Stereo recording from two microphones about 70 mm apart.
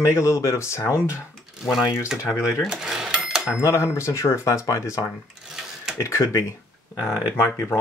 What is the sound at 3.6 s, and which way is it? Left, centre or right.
Speech, left.